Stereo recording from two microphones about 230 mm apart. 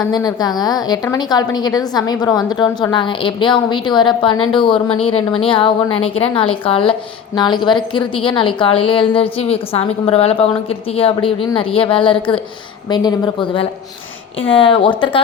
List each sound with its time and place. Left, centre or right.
0.1 s a woman's voice: centre